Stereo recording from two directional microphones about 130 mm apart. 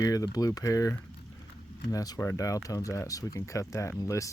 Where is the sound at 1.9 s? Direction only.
30° left (ahead or behind).